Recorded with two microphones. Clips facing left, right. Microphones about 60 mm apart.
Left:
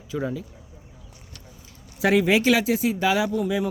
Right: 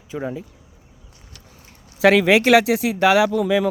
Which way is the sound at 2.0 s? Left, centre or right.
Right.